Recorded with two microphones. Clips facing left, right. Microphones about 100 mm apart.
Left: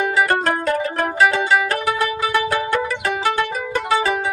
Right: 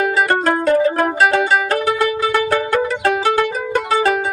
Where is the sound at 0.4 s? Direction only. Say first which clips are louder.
Right 6 dB; 30° right (ahead or behind).